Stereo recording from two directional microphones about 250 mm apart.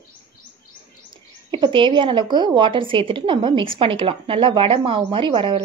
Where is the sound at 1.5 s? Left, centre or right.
Centre.